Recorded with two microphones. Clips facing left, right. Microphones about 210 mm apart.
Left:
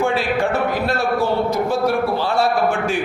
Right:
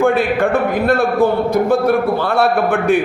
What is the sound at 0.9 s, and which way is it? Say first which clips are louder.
A man's voice: right 6 dB; 55° right (ahead or behind).